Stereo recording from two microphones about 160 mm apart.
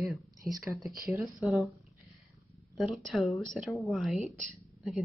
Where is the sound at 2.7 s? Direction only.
Centre (ahead or behind).